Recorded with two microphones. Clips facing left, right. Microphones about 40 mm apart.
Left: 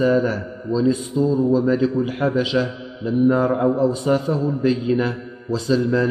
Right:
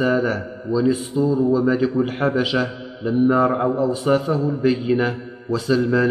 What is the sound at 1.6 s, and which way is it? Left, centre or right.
Speech, centre.